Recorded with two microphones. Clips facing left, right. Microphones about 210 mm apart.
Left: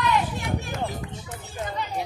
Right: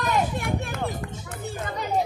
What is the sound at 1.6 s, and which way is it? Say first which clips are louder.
Music: left 1 dB; 50° right (ahead or behind).